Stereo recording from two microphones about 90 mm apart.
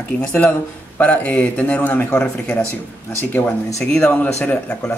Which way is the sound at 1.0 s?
15° left (ahead or behind).